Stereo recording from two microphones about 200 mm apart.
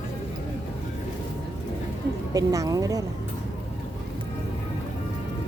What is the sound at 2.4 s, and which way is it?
Speech, 15° right (ahead or behind).